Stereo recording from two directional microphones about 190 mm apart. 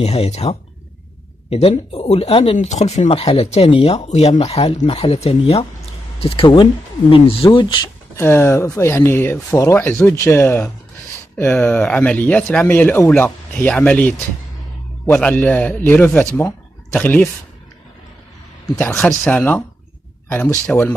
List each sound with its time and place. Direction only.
0.0 s speech: 35° left (ahead or behind)
8.2 s speech: 10° left (ahead or behind)
18.8 s speech: 5° left (ahead or behind)